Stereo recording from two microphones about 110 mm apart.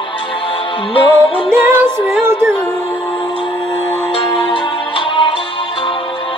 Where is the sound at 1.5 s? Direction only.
20° right (ahead or behind).